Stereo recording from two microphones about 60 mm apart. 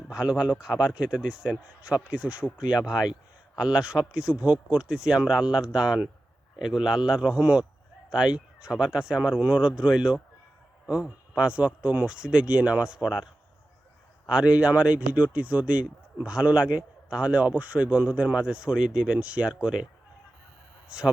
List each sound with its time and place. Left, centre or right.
0.1 s a man's voice: centre
14.3 s a man's voice: centre
20.9 s a man's voice: centre